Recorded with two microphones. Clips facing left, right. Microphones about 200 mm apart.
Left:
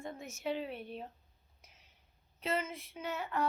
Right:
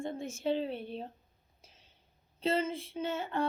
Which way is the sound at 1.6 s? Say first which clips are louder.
Right 3 dB; 30° right (ahead or behind).